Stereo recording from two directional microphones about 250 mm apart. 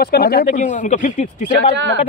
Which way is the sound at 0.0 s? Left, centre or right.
Left.